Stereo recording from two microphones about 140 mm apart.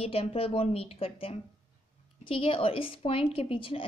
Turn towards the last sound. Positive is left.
turn(degrees=40)  # may be behind; listen again after turning